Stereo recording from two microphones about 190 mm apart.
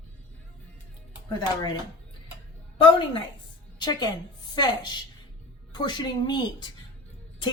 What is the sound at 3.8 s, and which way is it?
A woman's voice, 20° left (ahead or behind).